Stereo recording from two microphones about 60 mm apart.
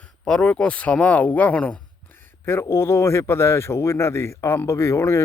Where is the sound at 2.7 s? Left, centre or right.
Left.